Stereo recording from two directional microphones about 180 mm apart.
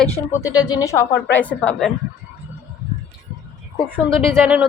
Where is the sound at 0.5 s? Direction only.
20° left (ahead or behind); by 1.9 s 5° left (ahead or behind).